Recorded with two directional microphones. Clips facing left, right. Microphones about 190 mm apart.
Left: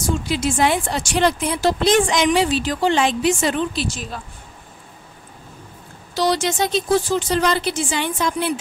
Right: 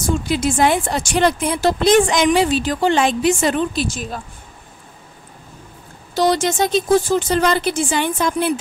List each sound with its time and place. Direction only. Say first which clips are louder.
0.3 s a woman's voice: right 3 dB; 50° right (ahead or behind)
6.1 s a woman's voice: right 3 dB; 50° right (ahead or behind)